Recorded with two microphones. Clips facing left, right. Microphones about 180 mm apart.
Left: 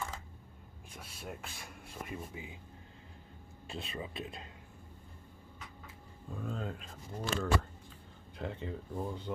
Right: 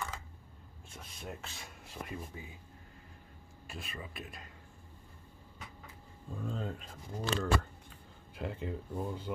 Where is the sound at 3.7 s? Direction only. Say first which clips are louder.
Left 4 dB; 30° left (ahead or behind).